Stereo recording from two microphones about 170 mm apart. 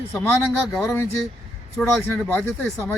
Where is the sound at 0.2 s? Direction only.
5° left (ahead or behind).